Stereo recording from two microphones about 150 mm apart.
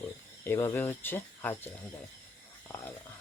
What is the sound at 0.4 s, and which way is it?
Speech, 15° left (ahead or behind).